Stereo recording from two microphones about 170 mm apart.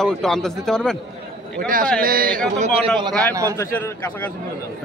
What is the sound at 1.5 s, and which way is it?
Speech, 55° right (ahead or behind).